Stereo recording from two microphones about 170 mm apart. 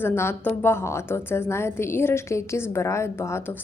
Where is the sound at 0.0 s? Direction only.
15° left (ahead or behind).